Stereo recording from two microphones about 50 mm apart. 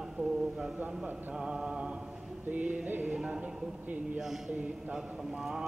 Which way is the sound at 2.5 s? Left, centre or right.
Right.